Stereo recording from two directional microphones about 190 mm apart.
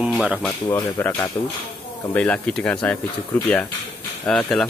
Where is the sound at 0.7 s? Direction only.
10° left (ahead or behind).